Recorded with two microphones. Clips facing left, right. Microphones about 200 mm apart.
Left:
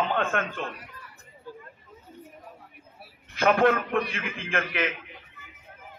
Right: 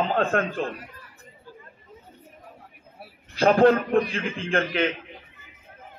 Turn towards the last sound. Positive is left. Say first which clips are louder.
# right 5 dB
turn(degrees=-30)  # may be behind; listen again after turning